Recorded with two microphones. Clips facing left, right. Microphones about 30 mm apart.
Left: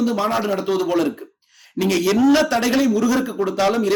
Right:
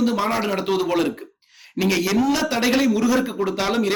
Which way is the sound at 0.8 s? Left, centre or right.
Right.